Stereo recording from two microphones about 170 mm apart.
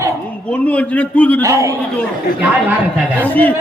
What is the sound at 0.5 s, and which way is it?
Speech, 10° left (ahead or behind).